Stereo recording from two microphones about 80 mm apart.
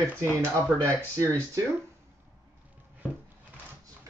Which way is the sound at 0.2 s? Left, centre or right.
Right.